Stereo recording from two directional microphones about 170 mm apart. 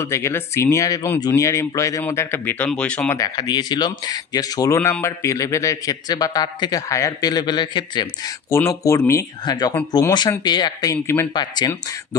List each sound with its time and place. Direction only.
0.0 s speech: 15° left (ahead or behind)
3.2 s speech: 25° left (ahead or behind)
8.5 s speech: 15° left (ahead or behind)